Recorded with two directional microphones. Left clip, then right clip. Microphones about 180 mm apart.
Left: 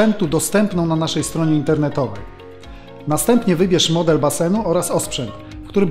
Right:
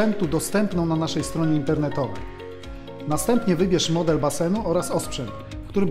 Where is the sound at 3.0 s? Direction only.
25° left (ahead or behind).